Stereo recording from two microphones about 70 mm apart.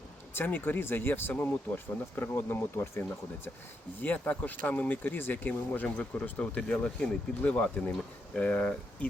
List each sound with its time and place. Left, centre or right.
0.3 s speech: left
4.0 s speech: left